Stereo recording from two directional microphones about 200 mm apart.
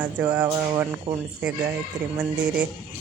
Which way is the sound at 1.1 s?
30° right (ahead or behind).